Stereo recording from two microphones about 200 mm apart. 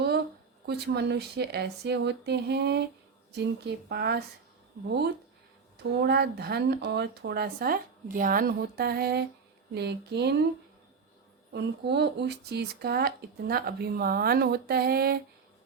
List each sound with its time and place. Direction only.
0.6 s speech: 55° right (ahead or behind)
5.7 s speech: 55° right (ahead or behind)
11.5 s speech: 60° right (ahead or behind)